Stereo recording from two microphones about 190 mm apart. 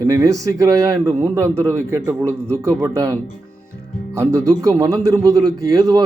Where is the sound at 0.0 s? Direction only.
20° right (ahead or behind).